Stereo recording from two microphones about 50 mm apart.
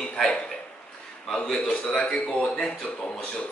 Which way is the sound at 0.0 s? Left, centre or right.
Centre.